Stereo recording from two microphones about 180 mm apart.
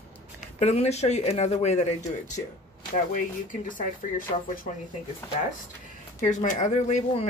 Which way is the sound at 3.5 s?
45° left (ahead or behind).